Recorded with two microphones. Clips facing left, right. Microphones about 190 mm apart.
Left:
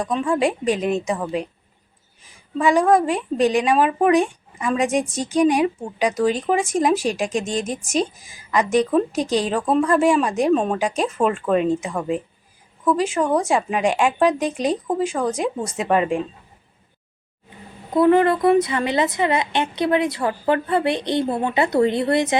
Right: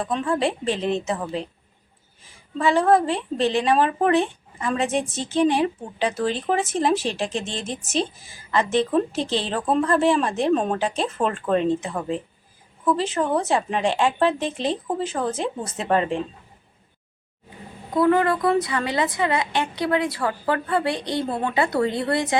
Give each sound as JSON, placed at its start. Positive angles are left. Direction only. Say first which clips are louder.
{"t": 0.0, "sound": "a woman's voice", "louder": "left 3 dB", "side_deg": 5}
{"t": 2.6, "sound": "a woman's voice", "louder": "left 2 dB", "side_deg": 15}
{"t": 8.5, "sound": "a woman's voice", "louder": "left 3 dB", "side_deg": 15}
{"t": 9.6, "sound": "speech", "louder": "left 1 dB", "side_deg": -5}
{"t": 9.8, "sound": "a woman's voice", "louder": "left 2 dB", "side_deg": 10}
{"t": 17.9, "sound": "a woman's voice", "louder": "left 4 dB", "side_deg": 20}